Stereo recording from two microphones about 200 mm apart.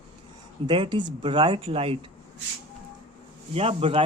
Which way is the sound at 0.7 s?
25° right (ahead or behind).